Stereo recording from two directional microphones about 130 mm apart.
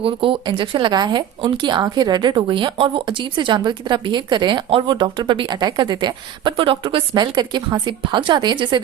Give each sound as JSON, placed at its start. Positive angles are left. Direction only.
{"t": 0.0, "sound": "speech", "side_deg": -40}